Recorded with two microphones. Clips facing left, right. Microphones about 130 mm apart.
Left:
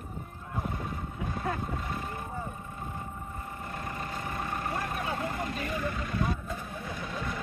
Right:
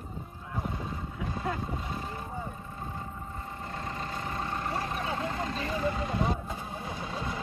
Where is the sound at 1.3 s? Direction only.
25° right (ahead or behind).